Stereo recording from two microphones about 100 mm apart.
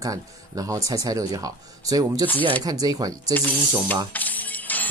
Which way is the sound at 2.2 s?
15° left (ahead or behind).